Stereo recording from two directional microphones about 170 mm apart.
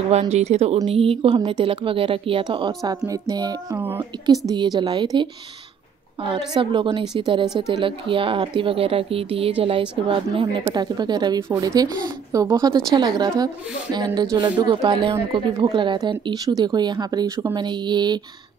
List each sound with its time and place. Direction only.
0.1 s a woman's voice: 40° right (ahead or behind); by 4.4 s 15° right (ahead or behind)
4.5 s a woman's voice: 25° right (ahead or behind)